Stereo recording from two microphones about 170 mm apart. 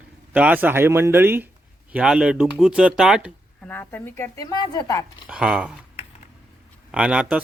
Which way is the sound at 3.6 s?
10° left (ahead or behind).